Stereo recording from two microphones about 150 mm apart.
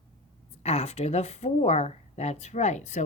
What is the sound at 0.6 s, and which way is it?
Speech, 45° left (ahead or behind).